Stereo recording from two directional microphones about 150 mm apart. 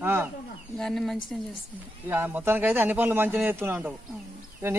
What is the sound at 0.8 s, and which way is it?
Speech, 5° left (ahead or behind).